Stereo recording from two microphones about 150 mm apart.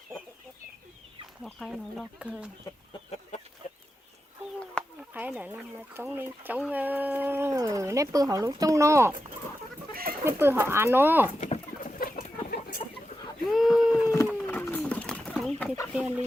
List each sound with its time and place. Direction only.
1.5 s speech: centre (ahead or behind)
4.8 s a sound: 5° left (ahead or behind)
5.1 s speech: 10° right (ahead or behind)
9.9 s chicken: 80° right
10.2 s speech: 15° right (ahead or behind)
11.3 s bird: 45° left (ahead or behind)
11.8 s chicken: 75° left (ahead or behind)
13.4 s a sound: centre (ahead or behind)
14.4 s chicken: 15° left (ahead or behind)